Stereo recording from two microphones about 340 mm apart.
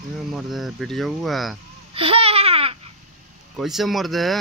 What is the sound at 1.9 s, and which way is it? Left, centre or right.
Babbling, centre.